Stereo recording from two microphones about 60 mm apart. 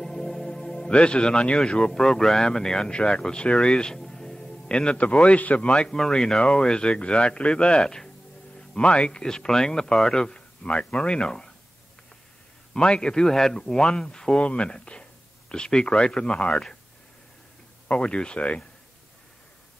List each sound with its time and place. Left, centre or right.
0.0 s music: centre
1.6 s speech: centre
12.7 s speech: centre
17.8 s speech: centre